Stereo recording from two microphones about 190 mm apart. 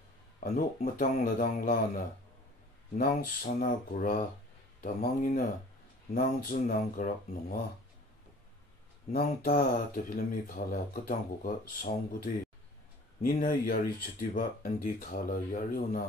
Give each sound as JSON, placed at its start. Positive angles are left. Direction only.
{"t": 0.4, "sound": "speech", "side_deg": 45}
{"t": 9.1, "sound": "speech", "side_deg": 45}
{"t": 13.2, "sound": "speech", "side_deg": 50}